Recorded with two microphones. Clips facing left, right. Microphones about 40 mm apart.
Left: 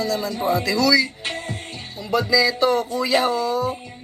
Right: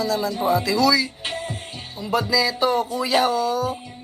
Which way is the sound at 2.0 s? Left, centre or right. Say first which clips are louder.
Left 2 dB; centre.